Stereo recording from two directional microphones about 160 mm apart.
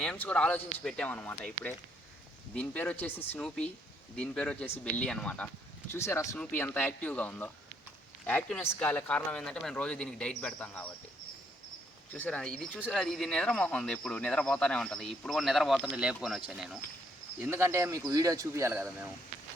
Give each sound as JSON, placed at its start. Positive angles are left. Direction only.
{"t": 0.0, "sound": "speech", "side_deg": 5}
{"t": 12.1, "sound": "a man's voice", "side_deg": 10}